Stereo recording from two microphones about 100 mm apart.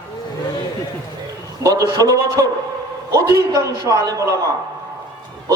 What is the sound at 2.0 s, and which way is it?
A man's voice, 35° right (ahead or behind).